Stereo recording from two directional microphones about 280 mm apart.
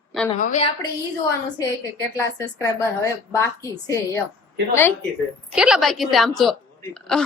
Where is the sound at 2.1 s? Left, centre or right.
Centre.